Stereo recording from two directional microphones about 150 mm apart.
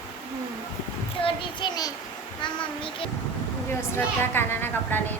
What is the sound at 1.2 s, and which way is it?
A child's voice, 35° left (ahead or behind).